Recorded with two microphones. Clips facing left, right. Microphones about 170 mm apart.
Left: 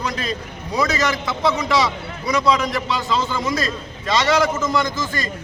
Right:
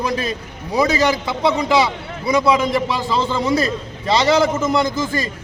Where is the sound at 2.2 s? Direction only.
25° right (ahead or behind).